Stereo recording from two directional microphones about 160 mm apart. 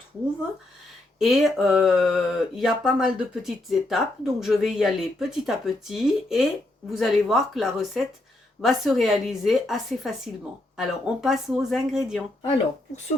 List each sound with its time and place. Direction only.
1.2 s speech: centre (ahead or behind)